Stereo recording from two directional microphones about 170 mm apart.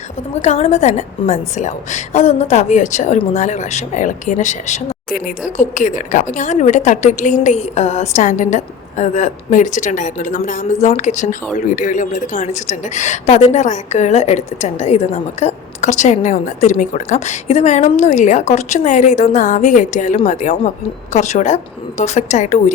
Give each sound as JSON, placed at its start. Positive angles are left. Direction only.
{"t": 0.4, "sound": "a woman's voice", "side_deg": 40}